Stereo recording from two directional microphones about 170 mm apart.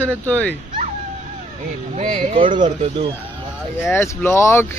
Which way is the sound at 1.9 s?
40° right (ahead or behind).